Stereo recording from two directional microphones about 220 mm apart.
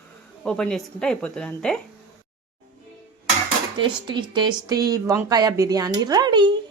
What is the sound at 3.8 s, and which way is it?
Speech, 20° right (ahead or behind).